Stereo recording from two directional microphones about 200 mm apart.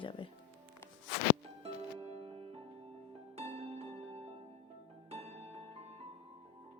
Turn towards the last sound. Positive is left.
turn(degrees=-30)  # may be behind; listen again after turning